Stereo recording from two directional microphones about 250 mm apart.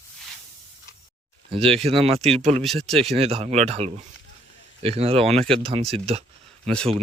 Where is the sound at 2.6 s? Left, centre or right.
Centre.